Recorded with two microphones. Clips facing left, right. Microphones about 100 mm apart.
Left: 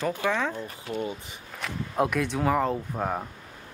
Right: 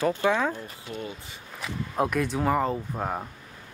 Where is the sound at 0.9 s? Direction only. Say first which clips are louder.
Left 5 dB; 30° left (ahead or behind).